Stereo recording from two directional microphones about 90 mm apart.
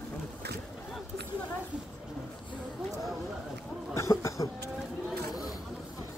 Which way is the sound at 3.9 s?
35° left (ahead or behind).